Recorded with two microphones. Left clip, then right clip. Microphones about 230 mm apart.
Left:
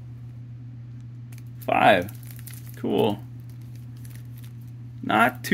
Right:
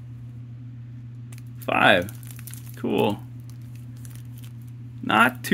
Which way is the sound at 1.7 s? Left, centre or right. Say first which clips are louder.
Even; centre.